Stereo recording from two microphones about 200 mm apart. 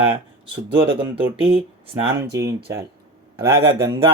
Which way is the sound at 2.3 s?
15° right (ahead or behind).